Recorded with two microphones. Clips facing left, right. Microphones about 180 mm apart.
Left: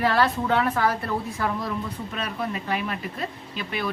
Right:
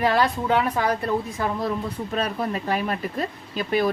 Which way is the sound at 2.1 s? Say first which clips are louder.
Right 6 dB; 35° right (ahead or behind).